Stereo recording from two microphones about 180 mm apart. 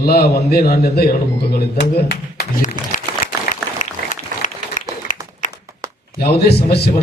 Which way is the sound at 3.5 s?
45° left (ahead or behind).